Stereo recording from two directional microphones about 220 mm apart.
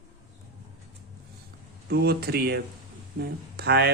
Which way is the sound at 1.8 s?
45° right (ahead or behind).